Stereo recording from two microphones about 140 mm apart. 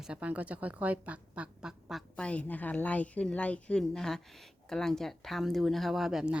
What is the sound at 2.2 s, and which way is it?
Speech, 10° left (ahead or behind).